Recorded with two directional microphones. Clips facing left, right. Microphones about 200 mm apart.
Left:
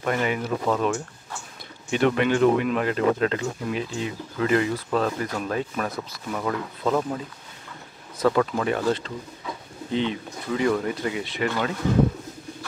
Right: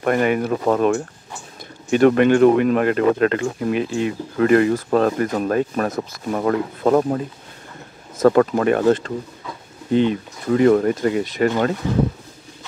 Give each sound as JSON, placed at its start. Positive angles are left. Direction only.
{"t": 0.0, "sound": "speech", "side_deg": -55}
{"t": 8.2, "sound": "speech", "side_deg": -50}